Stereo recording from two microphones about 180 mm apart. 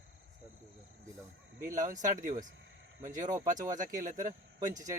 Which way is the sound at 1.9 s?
45° right (ahead or behind).